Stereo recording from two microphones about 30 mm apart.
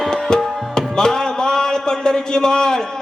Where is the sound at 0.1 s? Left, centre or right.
Centre.